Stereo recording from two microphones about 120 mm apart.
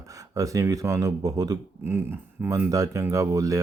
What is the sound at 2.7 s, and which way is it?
Speech, 30° right (ahead or behind).